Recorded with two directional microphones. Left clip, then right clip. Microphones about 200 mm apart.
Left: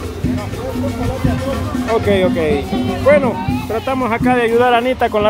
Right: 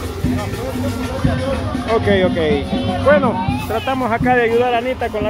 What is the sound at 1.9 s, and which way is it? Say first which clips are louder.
Speech: left 1 dB; 10° left (ahead or behind).